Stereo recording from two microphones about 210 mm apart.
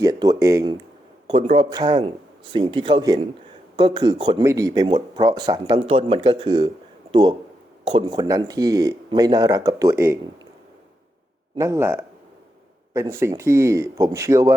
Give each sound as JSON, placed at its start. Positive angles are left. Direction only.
{"t": 0.0, "sound": "speech", "side_deg": -15}
{"t": 1.3, "sound": "speech", "side_deg": -30}
{"t": 11.5, "sound": "speech", "side_deg": -15}